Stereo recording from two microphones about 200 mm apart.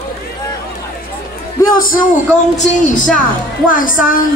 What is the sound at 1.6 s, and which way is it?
Speech, 45° left (ahead or behind).